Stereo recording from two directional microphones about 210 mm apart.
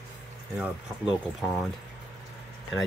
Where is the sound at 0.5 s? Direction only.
5° right (ahead or behind).